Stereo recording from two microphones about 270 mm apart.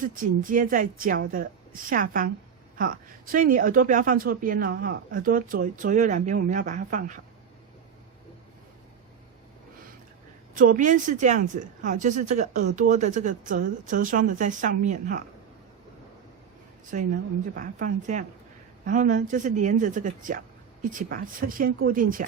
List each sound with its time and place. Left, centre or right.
0.0 s a woman's voice: right
10.5 s speech: right
16.8 s a woman's voice: right